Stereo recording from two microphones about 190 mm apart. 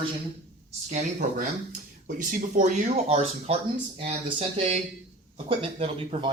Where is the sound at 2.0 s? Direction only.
45° right (ahead or behind).